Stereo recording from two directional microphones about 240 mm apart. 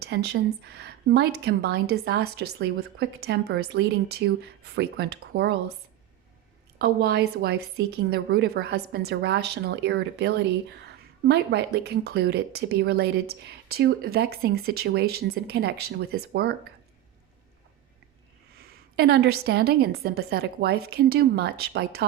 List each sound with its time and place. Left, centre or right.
0.0 s a woman's voice: right
6.7 s a woman's voice: right
18.5 s speech: right